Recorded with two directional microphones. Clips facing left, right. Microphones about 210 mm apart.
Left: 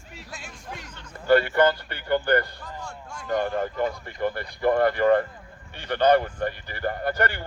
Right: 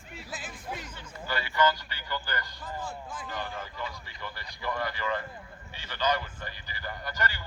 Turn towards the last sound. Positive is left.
turn(degrees=60)  # may be behind; listen again after turning